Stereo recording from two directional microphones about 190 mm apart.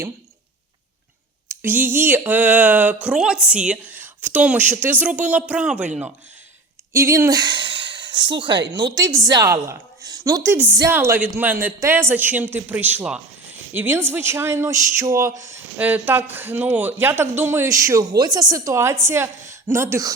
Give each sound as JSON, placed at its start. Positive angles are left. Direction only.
{"t": 1.5, "sound": "speech", "side_deg": -10}
{"t": 6.9, "sound": "speech", "side_deg": -15}